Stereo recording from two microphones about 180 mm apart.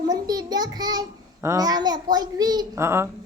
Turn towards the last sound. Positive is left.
turn(degrees=-15)  # may be behind; listen again after turning